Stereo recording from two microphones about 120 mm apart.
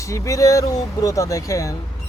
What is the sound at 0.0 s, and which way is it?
Speech, 25° left (ahead or behind).